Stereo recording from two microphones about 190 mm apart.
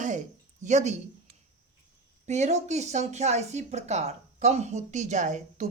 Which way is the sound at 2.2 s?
35° right (ahead or behind).